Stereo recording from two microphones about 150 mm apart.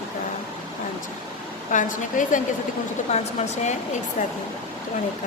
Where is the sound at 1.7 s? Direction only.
60° left (ahead or behind).